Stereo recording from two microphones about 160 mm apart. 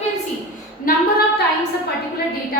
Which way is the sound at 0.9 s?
60° left (ahead or behind).